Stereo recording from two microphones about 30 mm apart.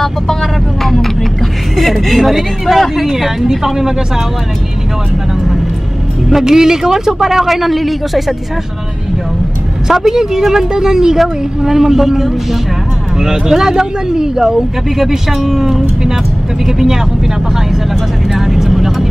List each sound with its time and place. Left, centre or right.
0.0 s speech: centre
3.1 s speech: centre
6.4 s speech: centre
9.8 s speech: centre
18.3 s vehicle: centre